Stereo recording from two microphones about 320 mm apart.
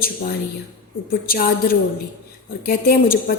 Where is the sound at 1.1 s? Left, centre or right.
Left.